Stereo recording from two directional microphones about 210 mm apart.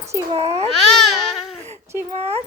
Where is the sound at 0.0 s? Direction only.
15° right (ahead or behind).